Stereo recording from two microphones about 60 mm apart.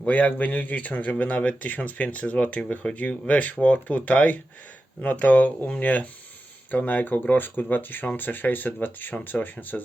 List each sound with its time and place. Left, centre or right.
0.0 s speech: left